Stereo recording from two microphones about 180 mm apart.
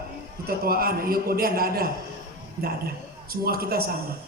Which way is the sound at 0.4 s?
55° right (ahead or behind).